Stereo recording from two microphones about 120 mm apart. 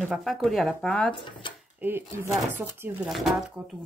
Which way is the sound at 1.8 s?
20° right (ahead or behind).